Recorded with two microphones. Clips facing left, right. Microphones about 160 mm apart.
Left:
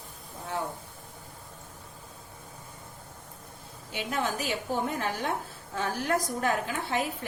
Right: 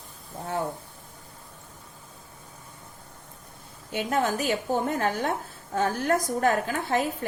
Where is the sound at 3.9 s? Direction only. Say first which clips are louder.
Right 5 dB; 50° right (ahead or behind).